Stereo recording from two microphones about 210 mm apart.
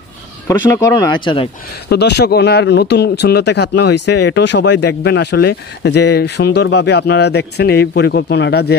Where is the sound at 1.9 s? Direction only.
55° left (ahead or behind).